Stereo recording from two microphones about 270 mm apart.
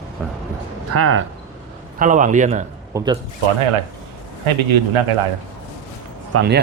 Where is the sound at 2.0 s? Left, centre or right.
Right.